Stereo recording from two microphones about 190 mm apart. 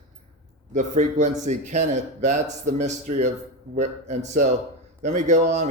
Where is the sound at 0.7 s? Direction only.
40° right (ahead or behind).